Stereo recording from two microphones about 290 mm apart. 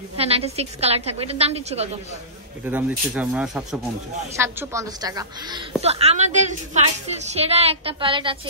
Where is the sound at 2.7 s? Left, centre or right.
Centre.